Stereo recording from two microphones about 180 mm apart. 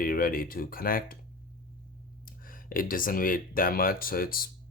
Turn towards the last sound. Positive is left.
turn(degrees=55)  # may be behind; listen again after turning